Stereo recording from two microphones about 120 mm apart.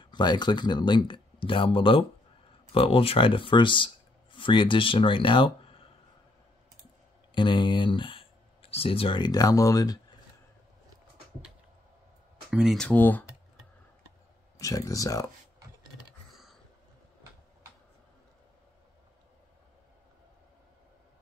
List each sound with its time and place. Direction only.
0.0 s speech: 40° left (ahead or behind)
7.3 s speech: 40° left (ahead or behind)
12.4 s speech: 5° right (ahead or behind)
12.8 s speech: 15° left (ahead or behind)
14.6 s speech: 30° left (ahead or behind)